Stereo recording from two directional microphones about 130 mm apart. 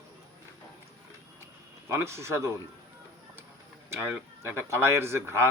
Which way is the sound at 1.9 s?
20° right (ahead or behind).